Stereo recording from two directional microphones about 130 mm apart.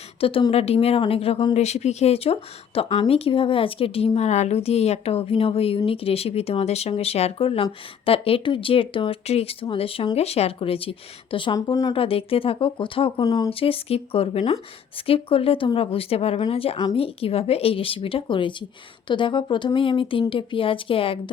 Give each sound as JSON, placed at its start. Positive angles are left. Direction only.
{"t": 0.2, "sound": "speech", "side_deg": 45}
{"t": 1.5, "sound": "speech", "side_deg": 55}
{"t": 11.9, "sound": "speech", "side_deg": 45}
{"t": 13.2, "sound": "speech", "side_deg": 30}
{"t": 13.5, "sound": "speech", "side_deg": 45}